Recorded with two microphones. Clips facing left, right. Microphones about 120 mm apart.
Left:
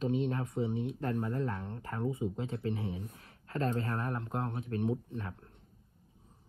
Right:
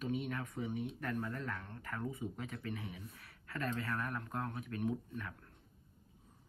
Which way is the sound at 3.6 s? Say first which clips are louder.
Left 5 dB; 30° left (ahead or behind).